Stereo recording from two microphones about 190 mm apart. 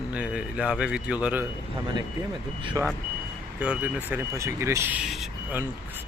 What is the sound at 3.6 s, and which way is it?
Speech, 5° right (ahead or behind).